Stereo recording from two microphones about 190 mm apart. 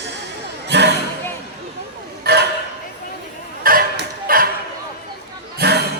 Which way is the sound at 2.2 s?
60° right (ahead or behind).